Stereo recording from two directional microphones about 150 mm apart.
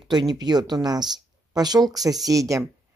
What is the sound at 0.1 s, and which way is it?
Speech, 30° right (ahead or behind).